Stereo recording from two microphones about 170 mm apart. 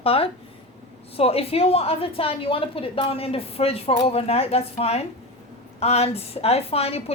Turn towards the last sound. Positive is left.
turn(degrees=35)  # may be behind; listen again after turning